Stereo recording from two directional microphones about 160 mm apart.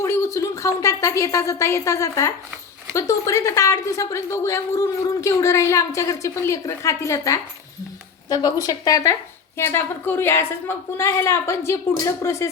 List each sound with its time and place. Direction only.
0.0 s a woman's voice: 15° left (ahead or behind)